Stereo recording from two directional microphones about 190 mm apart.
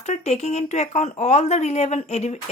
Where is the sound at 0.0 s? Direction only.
35° left (ahead or behind).